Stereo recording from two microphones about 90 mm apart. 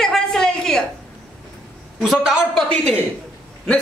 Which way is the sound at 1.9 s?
5° right (ahead or behind).